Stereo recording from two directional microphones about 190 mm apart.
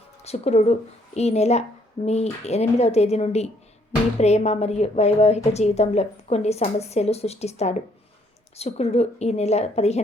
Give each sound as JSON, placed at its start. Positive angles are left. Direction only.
{"t": 0.2, "sound": "a woman's voice", "side_deg": 35}